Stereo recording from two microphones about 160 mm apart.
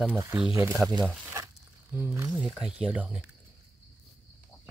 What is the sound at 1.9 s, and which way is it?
Speech, 15° right (ahead or behind).